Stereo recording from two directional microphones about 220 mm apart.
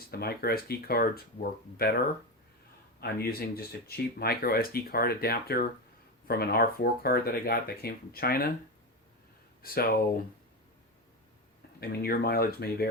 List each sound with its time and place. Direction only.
0.1 s speech: 45° left (ahead or behind)
3.0 s speech: 45° left (ahead or behind)
9.6 s speech: 40° left (ahead or behind)
11.8 s speech: 45° left (ahead or behind)